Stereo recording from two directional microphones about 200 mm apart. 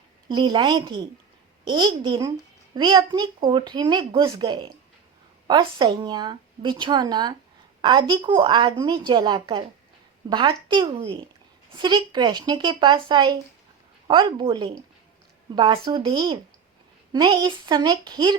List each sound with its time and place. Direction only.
0.3 s speech: 20° right (ahead or behind)